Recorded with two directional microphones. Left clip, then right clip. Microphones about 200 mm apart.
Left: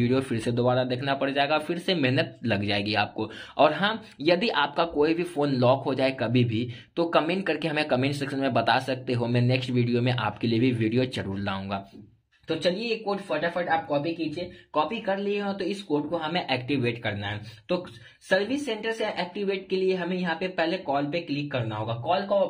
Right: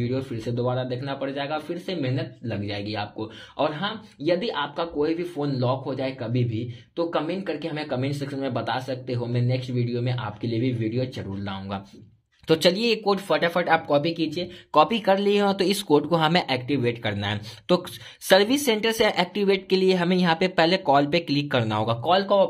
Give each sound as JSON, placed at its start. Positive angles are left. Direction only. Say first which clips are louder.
{"t": 0.0, "sound": "speech", "louder": "left 3 dB", "side_deg": 15}
{"t": 0.5, "sound": "a man's voice", "louder": "left 2 dB", "side_deg": 5}
{"t": 12.4, "sound": "a woman's voice", "louder": "right 6 dB", "side_deg": -40}
{"t": 16.3, "sound": "speech", "louder": "right 3 dB", "side_deg": -15}
{"t": 18.3, "sound": "a woman's voice", "louder": "right 7 dB", "side_deg": -35}